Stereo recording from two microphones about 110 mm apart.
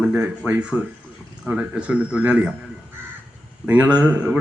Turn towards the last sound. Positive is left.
turn(degrees=-10)  # may be behind; listen again after turning